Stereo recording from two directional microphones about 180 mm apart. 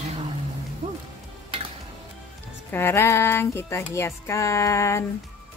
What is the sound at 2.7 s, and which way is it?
Music, 15° left (ahead or behind).